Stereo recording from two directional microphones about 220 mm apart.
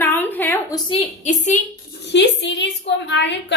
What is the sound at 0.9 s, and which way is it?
Speech, 30° left (ahead or behind).